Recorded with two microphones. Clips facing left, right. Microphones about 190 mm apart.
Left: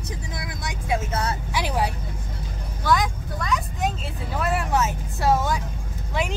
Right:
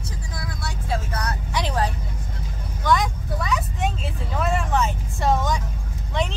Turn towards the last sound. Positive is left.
turn(degrees=5)  # may be behind; listen again after turning